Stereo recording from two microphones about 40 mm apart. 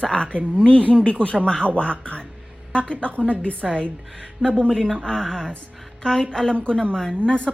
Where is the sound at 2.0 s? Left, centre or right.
Left.